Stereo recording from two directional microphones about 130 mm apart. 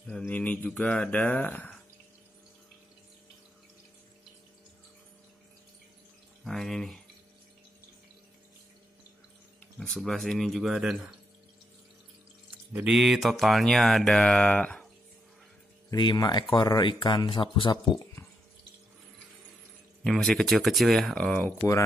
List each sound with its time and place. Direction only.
0.0 s speech: 5° left (ahead or behind)
6.4 s speech: centre (ahead or behind)
9.8 s speech: 5° left (ahead or behind)
12.7 s speech: 5° right (ahead or behind)
15.9 s speech: 30° left (ahead or behind)
18.2 s water: 25° left (ahead or behind)
20.0 s speech: 5° left (ahead or behind)